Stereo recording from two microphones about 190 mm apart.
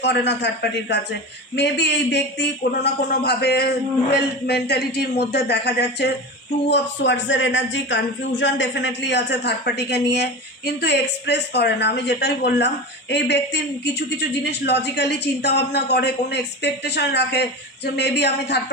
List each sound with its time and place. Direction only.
0.0 s a man's voice: 65° left (ahead or behind)